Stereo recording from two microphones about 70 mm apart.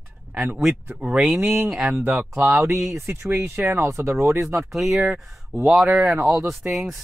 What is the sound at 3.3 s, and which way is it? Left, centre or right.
Speech, right.